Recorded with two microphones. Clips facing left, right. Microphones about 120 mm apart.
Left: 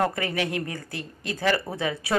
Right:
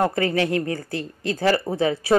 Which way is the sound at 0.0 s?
30° right (ahead or behind).